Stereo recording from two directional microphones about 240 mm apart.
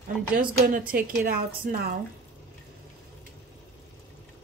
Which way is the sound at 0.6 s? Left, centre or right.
Right.